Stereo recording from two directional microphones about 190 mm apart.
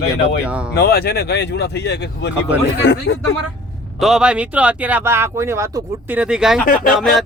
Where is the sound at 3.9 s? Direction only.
Centre (ahead or behind).